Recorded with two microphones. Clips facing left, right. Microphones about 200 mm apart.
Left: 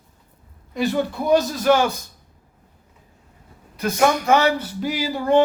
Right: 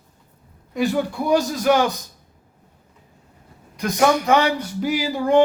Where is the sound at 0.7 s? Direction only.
15° right (ahead or behind).